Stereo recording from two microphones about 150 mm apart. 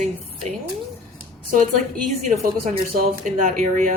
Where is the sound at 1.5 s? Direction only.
60° right (ahead or behind).